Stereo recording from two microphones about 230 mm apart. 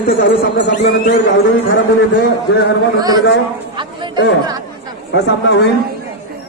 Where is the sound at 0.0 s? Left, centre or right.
Left.